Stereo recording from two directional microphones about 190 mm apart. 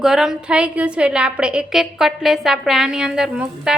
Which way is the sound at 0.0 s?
Centre (ahead or behind).